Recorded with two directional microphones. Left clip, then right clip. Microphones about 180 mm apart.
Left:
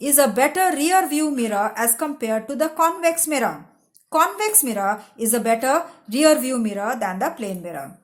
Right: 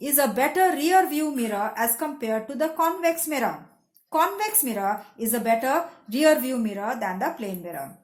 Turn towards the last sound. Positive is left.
turn(degrees=30)  # may be behind; listen again after turning